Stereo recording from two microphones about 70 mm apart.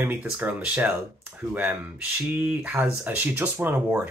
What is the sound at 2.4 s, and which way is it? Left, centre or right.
Speech, right.